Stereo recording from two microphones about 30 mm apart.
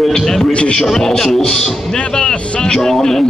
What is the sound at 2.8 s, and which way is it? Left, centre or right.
Speech, centre.